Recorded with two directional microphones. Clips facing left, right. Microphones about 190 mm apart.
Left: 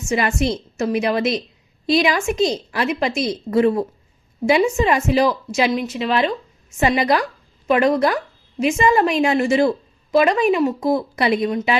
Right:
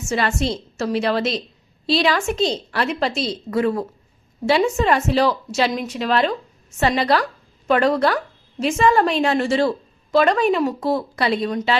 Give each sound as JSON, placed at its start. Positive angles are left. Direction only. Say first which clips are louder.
{"t": 0.1, "sound": "a woman's voice", "louder": "left 2 dB", "side_deg": 15}
{"t": 4.4, "sound": "a woman's voice", "louder": "left 1 dB", "side_deg": 10}
{"t": 5.7, "sound": "a woman's voice", "louder": "left 1 dB", "side_deg": 0}